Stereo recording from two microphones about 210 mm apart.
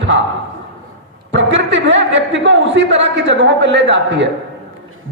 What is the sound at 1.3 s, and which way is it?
A man's voice, 55° right (ahead or behind).